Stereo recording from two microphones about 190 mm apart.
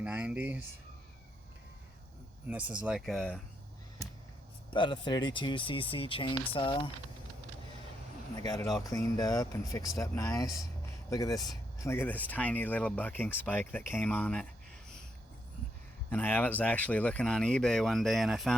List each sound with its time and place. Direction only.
0.0 s speech: 5° right (ahead or behind)
2.5 s speech: 10° right (ahead or behind)
4.7 s speech: 25° left (ahead or behind)
8.8 s speech: 20° left (ahead or behind)
16.0 s speech: 10° left (ahead or behind)